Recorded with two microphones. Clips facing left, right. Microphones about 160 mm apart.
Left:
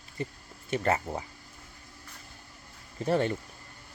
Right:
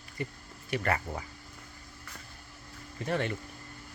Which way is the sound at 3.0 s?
35° left (ahead or behind).